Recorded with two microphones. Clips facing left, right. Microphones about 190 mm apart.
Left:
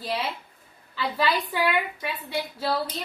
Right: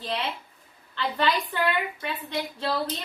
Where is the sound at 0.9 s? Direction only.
5° left (ahead or behind).